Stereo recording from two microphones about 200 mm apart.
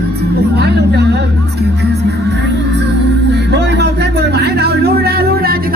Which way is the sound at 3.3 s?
60° right (ahead or behind).